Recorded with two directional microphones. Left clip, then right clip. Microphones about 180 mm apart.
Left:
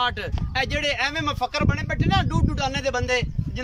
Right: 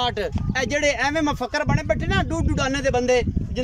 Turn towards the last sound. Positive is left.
turn(degrees=-40)  # may be behind; listen again after turning